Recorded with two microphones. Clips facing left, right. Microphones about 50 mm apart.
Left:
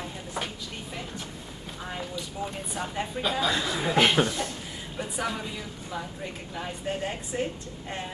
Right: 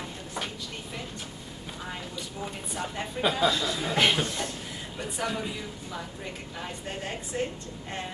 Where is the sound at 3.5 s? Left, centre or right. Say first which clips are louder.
Left 1 dB; left.